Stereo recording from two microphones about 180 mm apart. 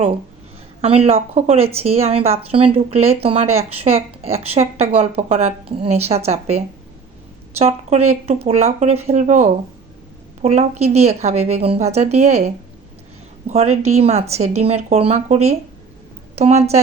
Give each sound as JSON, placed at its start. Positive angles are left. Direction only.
{"t": 0.8, "sound": "speech", "side_deg": -35}
{"t": 7.6, "sound": "speech", "side_deg": -40}
{"t": 13.5, "sound": "speech", "side_deg": -35}